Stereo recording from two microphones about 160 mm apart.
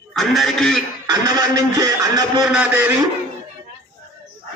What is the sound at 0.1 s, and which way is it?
Speech, centre (ahead or behind).